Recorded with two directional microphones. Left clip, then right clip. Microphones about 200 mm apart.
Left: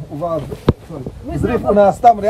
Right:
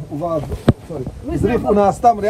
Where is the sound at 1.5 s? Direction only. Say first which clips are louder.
Left 4 dB; 35° left (ahead or behind).